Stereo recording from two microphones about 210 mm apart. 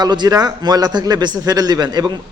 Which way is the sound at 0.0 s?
20° right (ahead or behind).